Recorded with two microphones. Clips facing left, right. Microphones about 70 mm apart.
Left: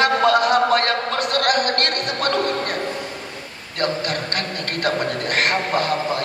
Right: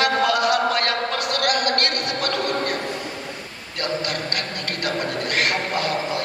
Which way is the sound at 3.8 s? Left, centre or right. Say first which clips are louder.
Left 3 dB; left.